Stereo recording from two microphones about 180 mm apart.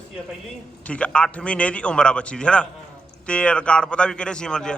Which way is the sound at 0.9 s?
5° left (ahead or behind).